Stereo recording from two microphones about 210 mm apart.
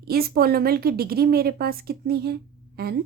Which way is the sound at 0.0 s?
45° right (ahead or behind).